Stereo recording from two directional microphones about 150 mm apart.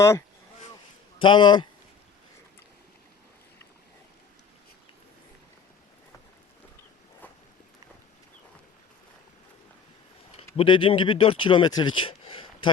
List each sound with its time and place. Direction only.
1.2 s a man's voice: 30° left (ahead or behind)
10.3 s speech: 35° left (ahead or behind)